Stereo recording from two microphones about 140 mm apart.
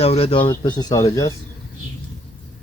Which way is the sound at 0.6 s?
30° left (ahead or behind).